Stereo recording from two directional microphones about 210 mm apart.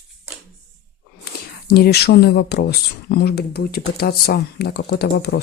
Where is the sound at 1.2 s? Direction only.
45° left (ahead or behind).